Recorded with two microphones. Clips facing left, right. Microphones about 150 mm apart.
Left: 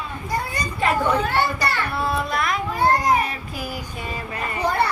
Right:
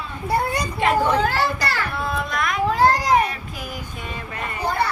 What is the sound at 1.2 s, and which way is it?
Speech, 90° right.